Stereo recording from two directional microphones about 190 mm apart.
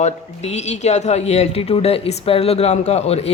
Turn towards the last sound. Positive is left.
turn(degrees=35)  # may be behind; listen again after turning